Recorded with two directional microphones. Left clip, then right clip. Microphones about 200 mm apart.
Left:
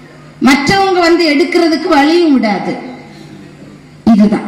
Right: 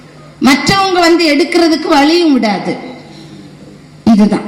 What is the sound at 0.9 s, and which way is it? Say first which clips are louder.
A woman's voice: right 1 dB; 60° right (ahead or behind).